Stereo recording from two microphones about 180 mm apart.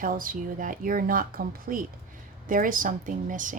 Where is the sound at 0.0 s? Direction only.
50° right (ahead or behind).